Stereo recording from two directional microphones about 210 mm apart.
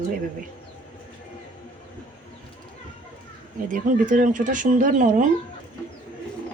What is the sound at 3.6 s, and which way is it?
Speech, 40° right (ahead or behind).